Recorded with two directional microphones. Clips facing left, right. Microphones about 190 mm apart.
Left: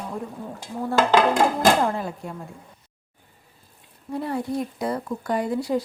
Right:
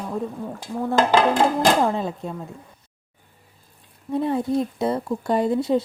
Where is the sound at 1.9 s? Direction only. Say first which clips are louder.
Right 3 dB; 20° right (ahead or behind).